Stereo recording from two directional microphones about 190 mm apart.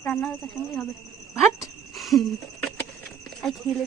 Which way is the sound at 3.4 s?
5° left (ahead or behind).